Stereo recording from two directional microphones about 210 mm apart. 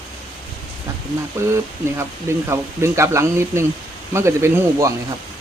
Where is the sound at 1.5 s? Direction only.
10° right (ahead or behind).